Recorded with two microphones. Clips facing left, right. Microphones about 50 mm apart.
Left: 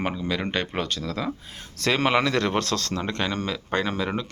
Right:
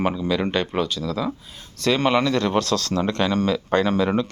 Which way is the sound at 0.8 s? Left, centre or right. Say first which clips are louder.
Right 4 dB; left.